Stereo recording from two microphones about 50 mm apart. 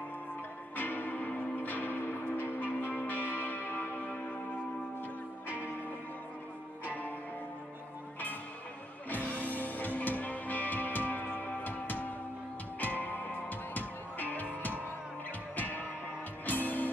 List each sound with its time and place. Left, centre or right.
0.7 s music: left
6.9 s music: left
9.1 s music: left